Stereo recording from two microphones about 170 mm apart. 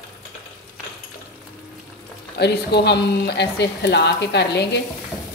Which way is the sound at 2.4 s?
80° left.